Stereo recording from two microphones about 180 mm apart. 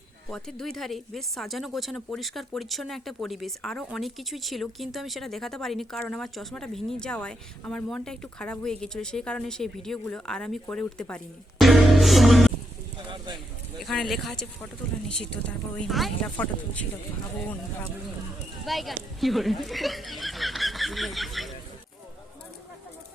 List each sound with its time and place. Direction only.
0.3 s speech: 5° left (ahead or behind)
13.1 s speech: 25° right (ahead or behind)
13.7 s speech: centre (ahead or behind)
18.6 s speech: centre (ahead or behind)